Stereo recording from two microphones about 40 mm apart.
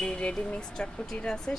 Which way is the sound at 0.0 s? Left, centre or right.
Left.